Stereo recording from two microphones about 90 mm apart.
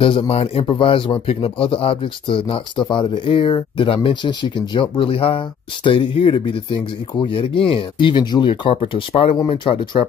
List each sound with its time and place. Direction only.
0.0 s speech: 80° left
2.9 s speech: 70° left (ahead or behind); by 5.4 s 85° left
5.9 s speech: 75° left (ahead or behind)